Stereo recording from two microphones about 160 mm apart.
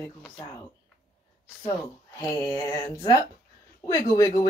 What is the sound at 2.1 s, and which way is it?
Speech, 20° left (ahead or behind).